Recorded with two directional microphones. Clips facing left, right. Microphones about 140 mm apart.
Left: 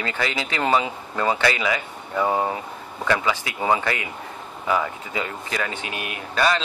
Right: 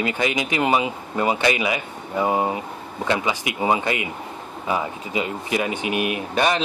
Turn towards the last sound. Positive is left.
turn(degrees=-20)  # may be behind; listen again after turning